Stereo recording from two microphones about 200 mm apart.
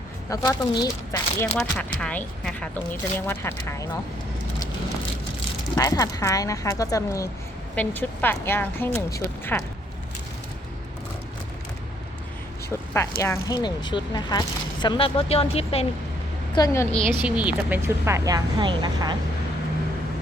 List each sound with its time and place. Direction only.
0.3 s speech: 20° left (ahead or behind)
1.5 s speech: 5° left (ahead or behind)
5.7 s speech: 20° left (ahead or behind)
13.2 s speech: 15° left (ahead or behind)
16.6 s speech: 15° left (ahead or behind)
17.1 s speech: 10° right (ahead or behind)